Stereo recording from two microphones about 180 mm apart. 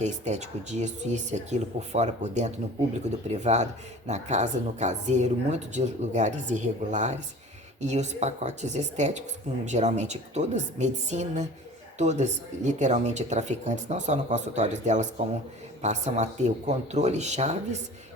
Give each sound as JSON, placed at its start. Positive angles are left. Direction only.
{"t": 0.0, "sound": "speech", "side_deg": -40}